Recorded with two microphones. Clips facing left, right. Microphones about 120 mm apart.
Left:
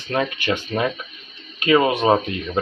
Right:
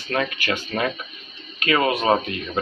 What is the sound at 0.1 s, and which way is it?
Speech, 20° left (ahead or behind).